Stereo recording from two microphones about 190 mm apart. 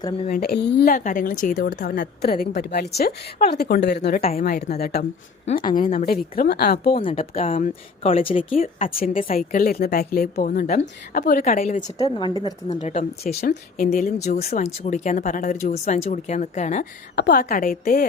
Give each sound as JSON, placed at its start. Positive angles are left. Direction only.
{"t": 0.3, "sound": "a woman's voice", "side_deg": 55}
{"t": 7.0, "sound": "a woman's voice", "side_deg": 30}
{"t": 8.5, "sound": "a woman's voice", "side_deg": 45}
{"t": 11.9, "sound": "a woman's voice", "side_deg": 20}
{"t": 12.6, "sound": "speech", "side_deg": 35}
{"t": 13.4, "sound": "speech", "side_deg": 50}
{"t": 14.3, "sound": "speech", "side_deg": 35}
{"t": 17.2, "sound": "speech", "side_deg": 55}